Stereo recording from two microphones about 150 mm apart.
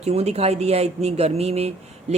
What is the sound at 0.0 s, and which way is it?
Speech, 45° right (ahead or behind).